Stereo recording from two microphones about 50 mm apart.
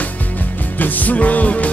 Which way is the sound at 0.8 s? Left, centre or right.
Left.